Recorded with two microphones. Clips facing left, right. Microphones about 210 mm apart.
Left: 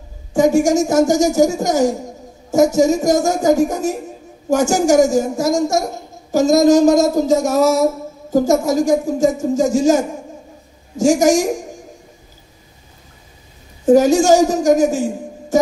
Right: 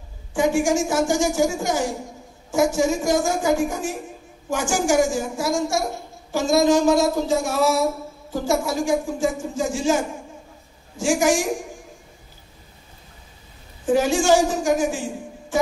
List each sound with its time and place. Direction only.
0.3 s a child's voice: 40° left (ahead or behind)
13.8 s a child's voice: 40° left (ahead or behind)